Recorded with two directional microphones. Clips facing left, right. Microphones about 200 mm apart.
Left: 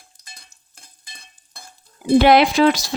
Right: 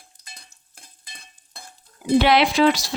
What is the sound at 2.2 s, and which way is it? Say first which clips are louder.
Speech: left 4 dB; 45° left (ahead or behind).